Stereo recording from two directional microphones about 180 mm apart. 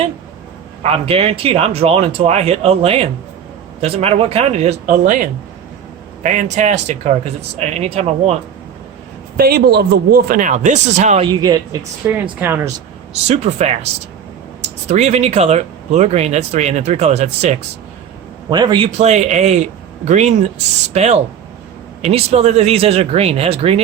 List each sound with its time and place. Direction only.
0.8 s speech: 35° right (ahead or behind)
9.4 s speech: 60° right (ahead or behind); by 11.3 s 40° right (ahead or behind)
11.3 s speech: 20° right (ahead or behind)
13.2 s speech: 40° right (ahead or behind)
18.5 s speech: 25° right (ahead or behind)
18.9 s speech: 40° right (ahead or behind)